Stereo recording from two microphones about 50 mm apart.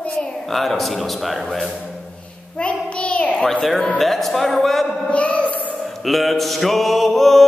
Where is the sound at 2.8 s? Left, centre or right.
Left.